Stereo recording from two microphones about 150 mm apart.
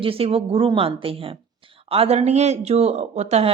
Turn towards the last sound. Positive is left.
turn(degrees=-45)  # may be behind; listen again after turning